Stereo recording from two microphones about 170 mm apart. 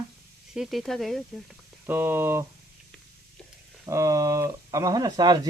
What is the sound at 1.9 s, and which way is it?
Speech, 15° right (ahead or behind).